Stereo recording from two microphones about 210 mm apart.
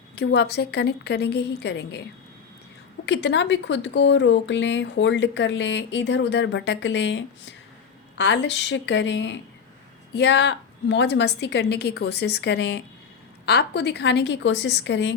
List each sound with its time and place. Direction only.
0.2 s a woman's voice: 55° left (ahead or behind)
3.1 s speech: 55° left (ahead or behind)